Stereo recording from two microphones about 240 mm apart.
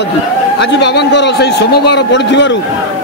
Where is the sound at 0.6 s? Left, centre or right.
Left.